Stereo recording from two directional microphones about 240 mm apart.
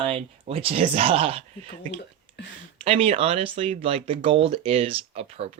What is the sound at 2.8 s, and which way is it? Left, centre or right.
Speech, right.